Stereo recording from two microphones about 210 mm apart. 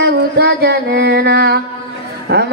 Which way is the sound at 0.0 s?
55° right (ahead or behind).